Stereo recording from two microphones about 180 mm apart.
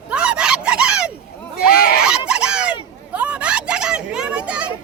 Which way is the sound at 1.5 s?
55° left (ahead or behind).